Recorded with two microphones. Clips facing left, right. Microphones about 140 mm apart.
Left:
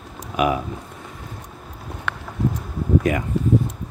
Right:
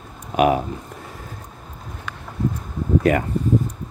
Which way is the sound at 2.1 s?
65° left (ahead or behind).